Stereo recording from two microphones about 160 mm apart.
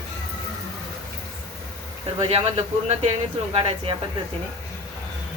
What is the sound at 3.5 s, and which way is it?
Speech, 35° right (ahead or behind).